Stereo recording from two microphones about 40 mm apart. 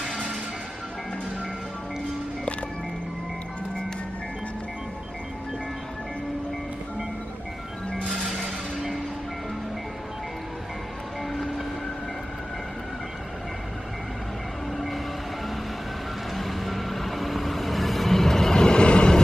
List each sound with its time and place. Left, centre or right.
8.3 s music: centre
11.3 s train: centre
16.3 s vehicle: centre; by 19.2 s left